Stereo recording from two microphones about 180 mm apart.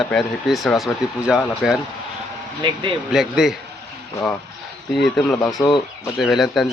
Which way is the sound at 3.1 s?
Centre (ahead or behind).